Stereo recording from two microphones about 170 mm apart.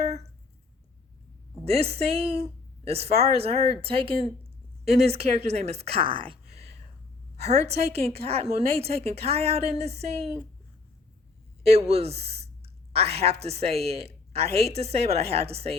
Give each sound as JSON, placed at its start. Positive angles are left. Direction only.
{"t": 1.6, "sound": "speech", "side_deg": -35}
{"t": 11.6, "sound": "speech", "side_deg": -40}